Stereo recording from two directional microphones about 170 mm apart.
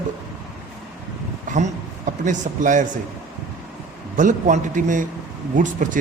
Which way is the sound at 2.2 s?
50° right (ahead or behind).